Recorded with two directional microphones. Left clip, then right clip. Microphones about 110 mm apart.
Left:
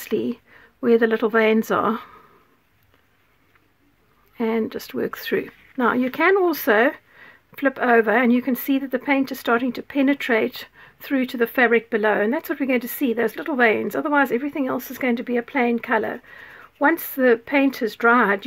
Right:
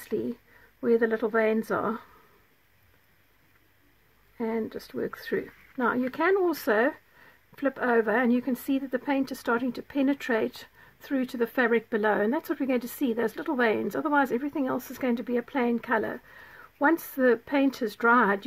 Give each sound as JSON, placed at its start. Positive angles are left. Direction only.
{"t": 0.1, "sound": "speech", "side_deg": 25}
{"t": 4.4, "sound": "speech", "side_deg": 30}